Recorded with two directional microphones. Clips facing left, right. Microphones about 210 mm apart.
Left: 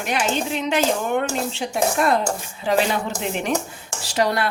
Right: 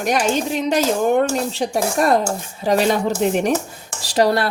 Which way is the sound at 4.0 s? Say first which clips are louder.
Right 5 dB; 35° right (ahead or behind).